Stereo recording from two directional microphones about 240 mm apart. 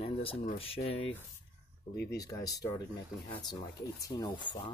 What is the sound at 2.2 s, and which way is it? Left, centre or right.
Speech, centre.